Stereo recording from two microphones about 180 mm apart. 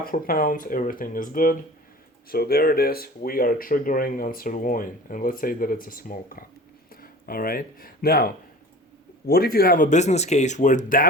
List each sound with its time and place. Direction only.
0.0 s speech: 50° left (ahead or behind)